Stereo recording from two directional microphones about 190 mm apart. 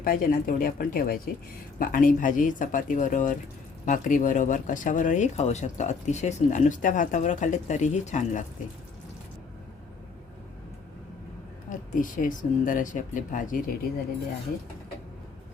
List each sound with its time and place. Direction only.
0.0 s speech: 50° left (ahead or behind)
11.7 s speech: 45° left (ahead or behind)